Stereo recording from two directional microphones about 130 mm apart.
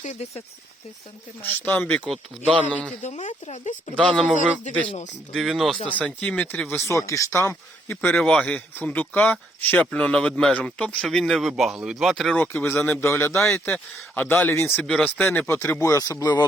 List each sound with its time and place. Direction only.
0.0 s speech: 60° left (ahead or behind)
1.4 s speech: 15° left (ahead or behind)
2.4 s speech: 10° right (ahead or behind)
3.0 s speech: 65° left (ahead or behind)
3.9 s speech: 5° left (ahead or behind)
5.3 s speech: centre (ahead or behind); by 8.1 s 20° left (ahead or behind)
8.1 s speech: 10° left (ahead or behind)
13.4 s speech: 5° left (ahead or behind); by 16.5 s 30° left (ahead or behind)